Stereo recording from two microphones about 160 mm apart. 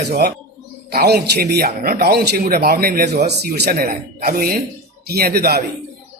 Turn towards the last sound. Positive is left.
turn(degrees=-75)  # may be behind; listen again after turning